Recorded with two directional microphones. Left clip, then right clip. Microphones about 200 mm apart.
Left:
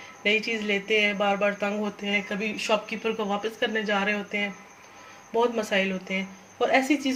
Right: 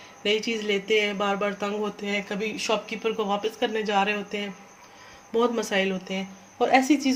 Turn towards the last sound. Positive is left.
turn(degrees=-45)  # may be behind; listen again after turning